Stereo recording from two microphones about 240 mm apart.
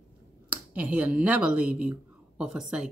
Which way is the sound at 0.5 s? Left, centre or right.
Centre.